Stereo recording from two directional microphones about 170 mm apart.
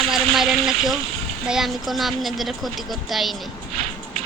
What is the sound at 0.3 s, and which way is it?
A child's voice, centre (ahead or behind).